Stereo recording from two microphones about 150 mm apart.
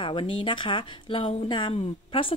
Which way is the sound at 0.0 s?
35° left (ahead or behind).